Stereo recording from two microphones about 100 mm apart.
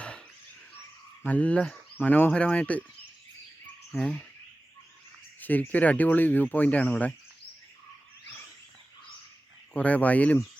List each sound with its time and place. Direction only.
0.0 s a sound: 10° left (ahead or behind)
1.2 s speech: 15° left (ahead or behind)
3.9 s speech: 10° left (ahead or behind)
5.4 s speech: 20° left (ahead or behind)
9.7 s speech: 15° left (ahead or behind)